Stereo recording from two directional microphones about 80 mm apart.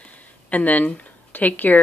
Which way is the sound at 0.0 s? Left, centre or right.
Centre.